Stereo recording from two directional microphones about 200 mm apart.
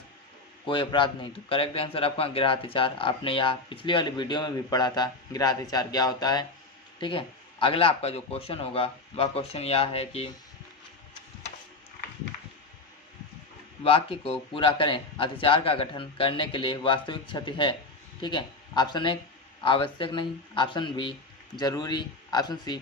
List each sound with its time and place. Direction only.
0.7 s speech: 25° left (ahead or behind)
13.8 s speech: 30° left (ahead or behind)